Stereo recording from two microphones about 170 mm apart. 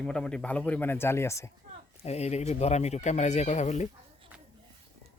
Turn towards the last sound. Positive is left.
turn(degrees=40)  # may be behind; listen again after turning